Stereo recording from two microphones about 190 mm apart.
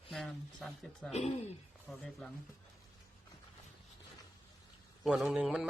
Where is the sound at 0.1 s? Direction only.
Centre (ahead or behind).